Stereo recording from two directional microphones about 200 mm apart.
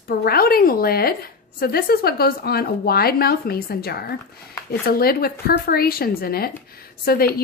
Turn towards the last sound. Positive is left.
turn(degrees=50)  # may be behind; listen again after turning